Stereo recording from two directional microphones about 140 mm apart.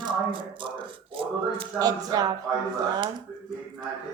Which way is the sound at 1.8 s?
25° right (ahead or behind).